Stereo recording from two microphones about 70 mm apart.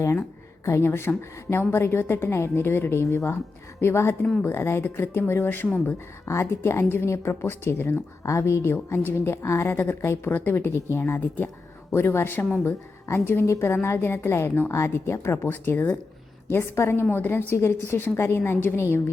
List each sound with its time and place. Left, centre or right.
0.0 s a woman's voice: left
8.2 s a woman's voice: left
16.5 s a woman's voice: left